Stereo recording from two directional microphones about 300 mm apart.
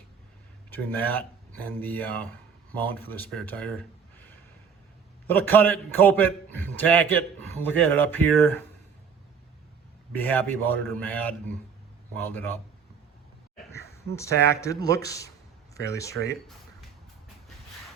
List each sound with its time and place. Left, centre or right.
0.7 s a man's voice: centre
5.3 s a man's voice: centre
10.2 s a man's voice: centre
14.1 s speech: centre